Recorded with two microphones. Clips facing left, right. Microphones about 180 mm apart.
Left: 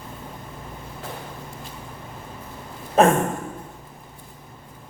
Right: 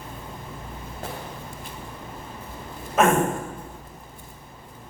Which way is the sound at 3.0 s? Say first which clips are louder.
Left 3 dB; 35° left (ahead or behind).